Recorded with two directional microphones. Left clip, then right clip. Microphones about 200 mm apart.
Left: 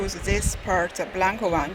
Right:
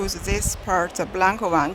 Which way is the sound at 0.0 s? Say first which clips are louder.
Right 1 dB; 20° right (ahead or behind).